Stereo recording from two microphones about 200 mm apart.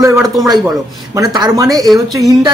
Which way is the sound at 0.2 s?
Centre (ahead or behind).